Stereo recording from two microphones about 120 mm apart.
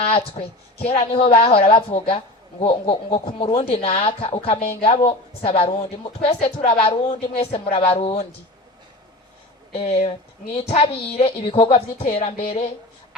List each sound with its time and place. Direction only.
0.0 s a woman's voice: 55° left (ahead or behind)
9.7 s a woman's voice: 60° left (ahead or behind)